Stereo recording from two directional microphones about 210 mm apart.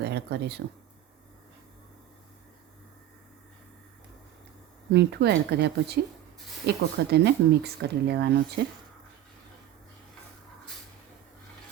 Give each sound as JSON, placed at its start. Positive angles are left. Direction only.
{"t": 0.0, "sound": "speech", "side_deg": -50}
{"t": 4.9, "sound": "speech", "side_deg": -50}